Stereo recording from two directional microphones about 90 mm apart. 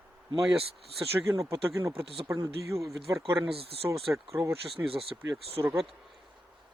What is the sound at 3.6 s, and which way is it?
Speech, 90° right.